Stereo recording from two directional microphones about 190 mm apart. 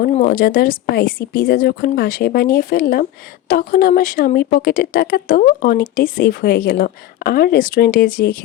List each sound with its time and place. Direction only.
0.0 s a woman's voice: 45° left (ahead or behind)